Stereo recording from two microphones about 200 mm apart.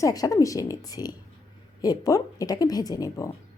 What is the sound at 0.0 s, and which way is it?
A woman's voice, 15° left (ahead or behind).